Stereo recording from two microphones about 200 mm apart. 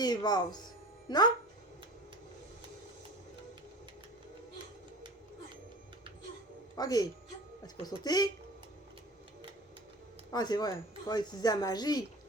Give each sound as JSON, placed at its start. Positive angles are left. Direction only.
{"t": 0.0, "sound": "speech", "side_deg": 20}
{"t": 6.7, "sound": "speech", "side_deg": 20}
{"t": 10.3, "sound": "speech", "side_deg": 20}